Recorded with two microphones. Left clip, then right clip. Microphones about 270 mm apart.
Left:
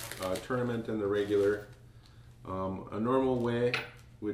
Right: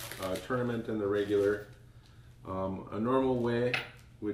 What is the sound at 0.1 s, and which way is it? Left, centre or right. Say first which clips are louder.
Speech: left 1 dB; centre.